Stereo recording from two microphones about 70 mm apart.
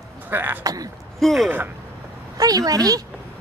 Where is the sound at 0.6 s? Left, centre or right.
Right.